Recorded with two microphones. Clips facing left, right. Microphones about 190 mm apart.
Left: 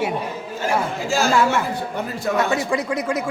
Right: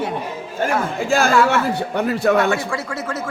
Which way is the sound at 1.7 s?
70° right (ahead or behind).